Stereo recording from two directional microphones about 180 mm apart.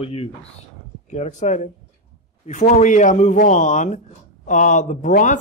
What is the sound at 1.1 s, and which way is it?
Speech, 40° left (ahead or behind).